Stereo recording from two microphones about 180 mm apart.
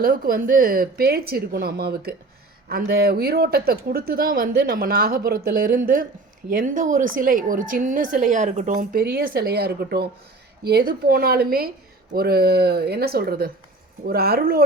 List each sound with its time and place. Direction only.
0.0 s speech: 50° right (ahead or behind)